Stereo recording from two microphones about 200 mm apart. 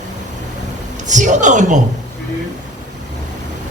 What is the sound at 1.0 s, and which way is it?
Speech, 40° right (ahead or behind).